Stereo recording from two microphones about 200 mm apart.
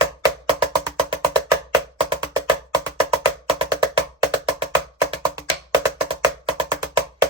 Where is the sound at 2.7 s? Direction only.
20° right (ahead or behind).